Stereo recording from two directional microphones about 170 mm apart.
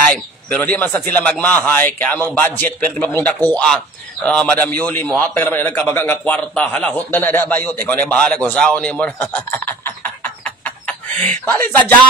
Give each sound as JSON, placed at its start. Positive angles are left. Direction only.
{"t": 0.1, "sound": "speech", "side_deg": 10}
{"t": 11.1, "sound": "speech", "side_deg": -40}